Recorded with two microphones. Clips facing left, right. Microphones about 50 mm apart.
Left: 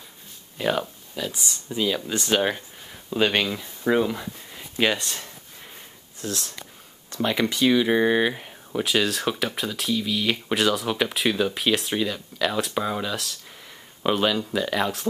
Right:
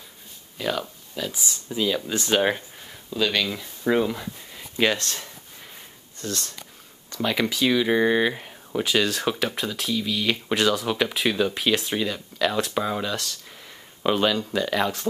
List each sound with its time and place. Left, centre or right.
0.6 s speech: centre
1.1 s speech: centre
3.1 s speech: left
3.4 s speech: centre